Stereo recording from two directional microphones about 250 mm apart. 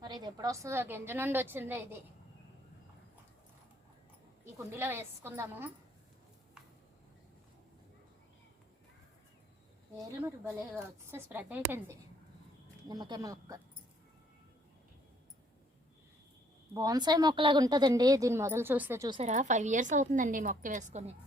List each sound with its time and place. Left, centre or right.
0.0 s a woman's voice: centre
4.5 s a woman's voice: centre
10.2 s a woman's voice: centre
16.7 s a woman's voice: centre